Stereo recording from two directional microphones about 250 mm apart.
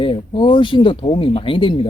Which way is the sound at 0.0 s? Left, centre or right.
Centre.